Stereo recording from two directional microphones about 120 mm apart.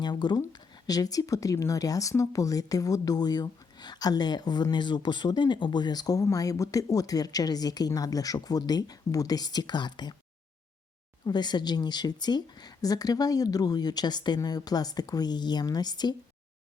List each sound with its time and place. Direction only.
0.0 s speech: 35° left (ahead or behind)
11.3 s speech: 35° left (ahead or behind)